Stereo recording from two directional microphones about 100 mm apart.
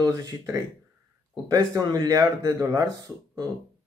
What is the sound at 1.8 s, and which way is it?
Speech, 40° right (ahead or behind).